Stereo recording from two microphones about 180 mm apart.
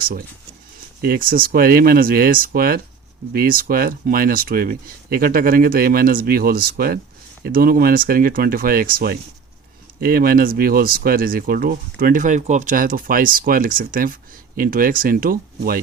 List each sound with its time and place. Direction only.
1.0 s speech: 55° right (ahead or behind)